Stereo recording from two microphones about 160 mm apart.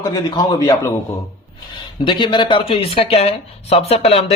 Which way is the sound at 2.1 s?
30° left (ahead or behind).